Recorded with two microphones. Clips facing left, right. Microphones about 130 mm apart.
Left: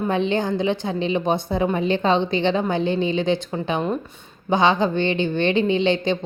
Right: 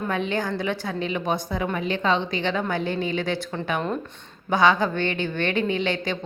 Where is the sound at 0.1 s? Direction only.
25° left (ahead or behind).